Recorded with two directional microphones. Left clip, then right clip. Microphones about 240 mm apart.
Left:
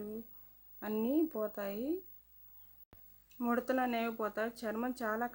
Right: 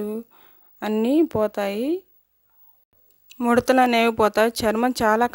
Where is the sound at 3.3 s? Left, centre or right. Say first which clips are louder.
Right 16 dB; right.